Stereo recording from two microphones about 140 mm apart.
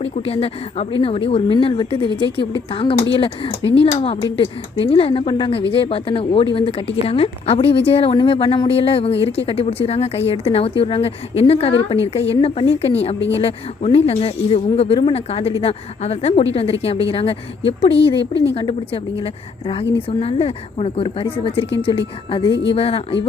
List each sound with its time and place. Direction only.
0.0 s speech: 45° left (ahead or behind)